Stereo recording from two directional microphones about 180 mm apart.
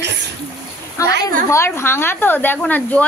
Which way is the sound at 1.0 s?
15° left (ahead or behind).